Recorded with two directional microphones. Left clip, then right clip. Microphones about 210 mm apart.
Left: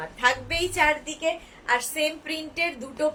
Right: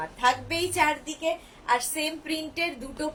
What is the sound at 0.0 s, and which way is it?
A woman's voice, 15° left (ahead or behind).